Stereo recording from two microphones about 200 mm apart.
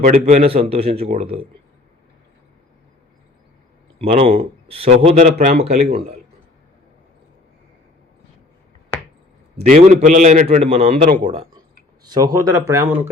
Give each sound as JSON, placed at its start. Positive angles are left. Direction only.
{"t": 0.0, "sound": "a man's voice", "side_deg": -35}
{"t": 3.9, "sound": "a man's voice", "side_deg": -30}
{"t": 9.6, "sound": "a man's voice", "side_deg": -40}